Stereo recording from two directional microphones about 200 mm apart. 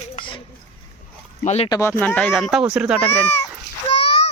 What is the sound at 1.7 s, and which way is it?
Speech, 15° left (ahead or behind).